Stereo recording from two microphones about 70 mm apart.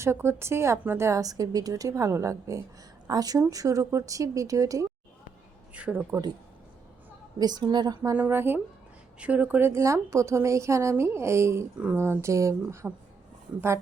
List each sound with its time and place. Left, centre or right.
0.0 s speech: right
1.2 s a woman's voice: right
3.1 s a woman's voice: right
5.7 s speech: centre
7.3 s a woman's voice: right
8.1 s speech: right
9.1 s speech: right